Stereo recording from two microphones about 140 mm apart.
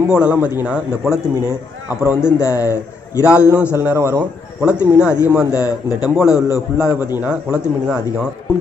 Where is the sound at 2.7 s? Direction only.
20° left (ahead or behind).